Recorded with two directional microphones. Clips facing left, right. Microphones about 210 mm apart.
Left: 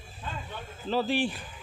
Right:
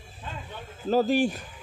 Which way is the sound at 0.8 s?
45° right (ahead or behind).